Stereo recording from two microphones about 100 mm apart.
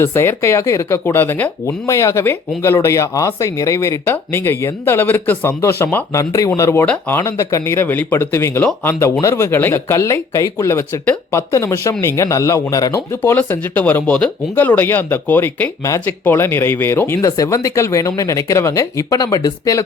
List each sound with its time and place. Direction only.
0.0 s speech: 25° left (ahead or behind)
13.3 s speech: 15° left (ahead or behind)
17.2 s speech: 35° left (ahead or behind)